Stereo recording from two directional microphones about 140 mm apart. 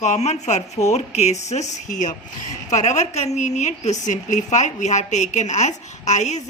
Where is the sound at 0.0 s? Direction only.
55° left (ahead or behind).